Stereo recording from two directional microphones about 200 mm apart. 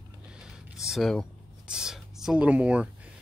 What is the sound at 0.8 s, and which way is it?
Speech, centre (ahead or behind).